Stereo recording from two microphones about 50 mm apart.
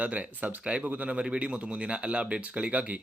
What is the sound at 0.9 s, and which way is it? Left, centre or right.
Speech, right.